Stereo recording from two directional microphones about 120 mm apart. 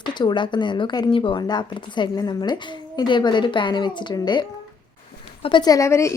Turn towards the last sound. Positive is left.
turn(degrees=25)  # may be behind; listen again after turning